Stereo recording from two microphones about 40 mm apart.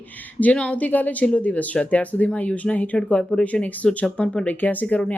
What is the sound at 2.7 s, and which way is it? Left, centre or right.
Speech, left.